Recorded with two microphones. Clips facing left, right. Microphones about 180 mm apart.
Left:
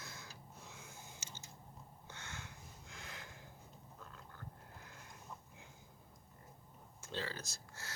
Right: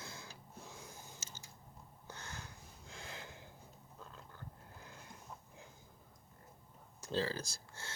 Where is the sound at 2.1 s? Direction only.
40° right (ahead or behind).